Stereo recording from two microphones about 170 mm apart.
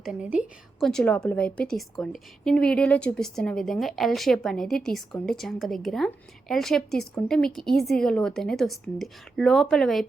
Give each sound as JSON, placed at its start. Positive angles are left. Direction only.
{"t": 0.0, "sound": "a woman's voice", "side_deg": -5}
{"t": 0.9, "sound": "a woman's voice", "side_deg": 5}